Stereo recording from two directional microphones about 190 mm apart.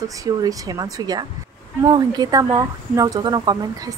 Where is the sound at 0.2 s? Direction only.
20° right (ahead or behind).